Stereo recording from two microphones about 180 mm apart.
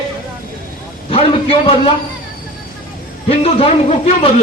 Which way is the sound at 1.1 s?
30° left (ahead or behind).